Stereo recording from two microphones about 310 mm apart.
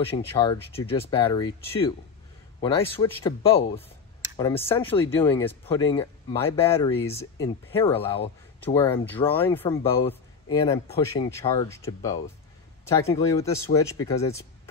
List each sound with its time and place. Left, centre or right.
0.0 s speech: centre